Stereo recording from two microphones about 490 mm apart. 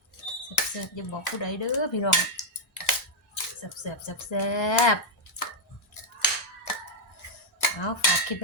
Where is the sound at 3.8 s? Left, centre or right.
Left.